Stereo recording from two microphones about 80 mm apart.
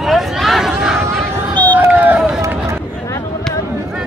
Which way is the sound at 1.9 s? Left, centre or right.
Right.